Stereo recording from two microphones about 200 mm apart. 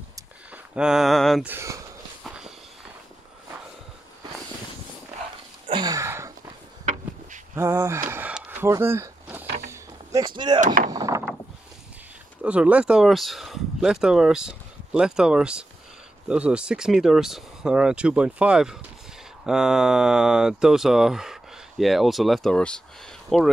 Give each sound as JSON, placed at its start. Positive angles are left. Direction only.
{"t": 0.7, "sound": "speech", "side_deg": -5}
{"t": 1.5, "sound": "speech", "side_deg": -15}
{"t": 2.2, "sound": "walk", "side_deg": -5}
{"t": 5.7, "sound": "a sound", "side_deg": -20}
{"t": 7.5, "sound": "a sound", "side_deg": -15}
{"t": 9.7, "sound": "door", "side_deg": -20}
{"t": 10.6, "sound": "speech", "side_deg": -45}
{"t": 10.9, "sound": "mechanisms", "side_deg": -15}
{"t": 12.4, "sound": "speech", "side_deg": -5}